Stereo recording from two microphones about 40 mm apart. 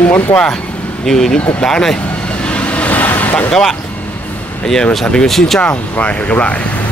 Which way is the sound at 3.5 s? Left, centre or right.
Centre.